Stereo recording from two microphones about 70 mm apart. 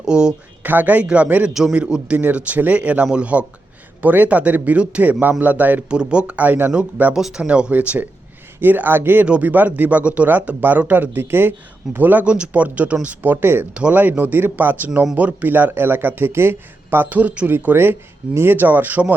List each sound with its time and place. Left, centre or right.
0.0 s speech: centre
0.6 s speech: right
7.2 s speech: centre
7.4 s speech: centre; by 9.2 s right
9.2 s speech: centre
13.7 s speech: right